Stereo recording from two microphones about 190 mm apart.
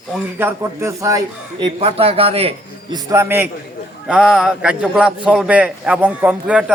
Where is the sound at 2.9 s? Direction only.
15° right (ahead or behind).